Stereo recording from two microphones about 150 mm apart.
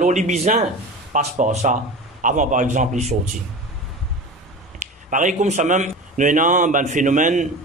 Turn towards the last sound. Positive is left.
turn(degrees=-60)  # may be behind; listen again after turning